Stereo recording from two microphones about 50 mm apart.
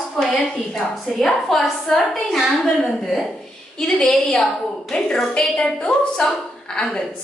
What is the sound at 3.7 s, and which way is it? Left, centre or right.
Speech, centre.